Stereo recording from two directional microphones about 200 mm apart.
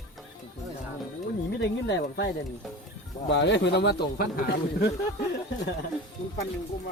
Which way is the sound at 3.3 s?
65° left (ahead or behind).